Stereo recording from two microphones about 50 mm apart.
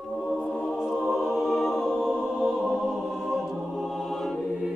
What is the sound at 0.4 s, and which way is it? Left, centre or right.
Music, left.